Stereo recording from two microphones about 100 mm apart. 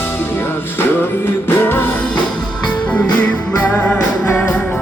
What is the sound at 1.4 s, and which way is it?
Music, 20° left (ahead or behind).